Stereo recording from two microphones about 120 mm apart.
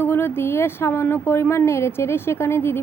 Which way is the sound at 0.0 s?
20° left (ahead or behind).